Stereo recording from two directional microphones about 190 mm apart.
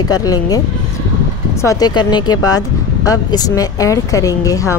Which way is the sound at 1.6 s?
20° left (ahead or behind).